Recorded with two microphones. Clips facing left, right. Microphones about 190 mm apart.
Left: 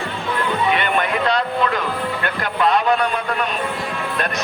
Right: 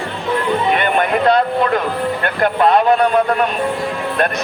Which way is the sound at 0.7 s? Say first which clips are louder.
Right 5 dB; 45° right (ahead or behind).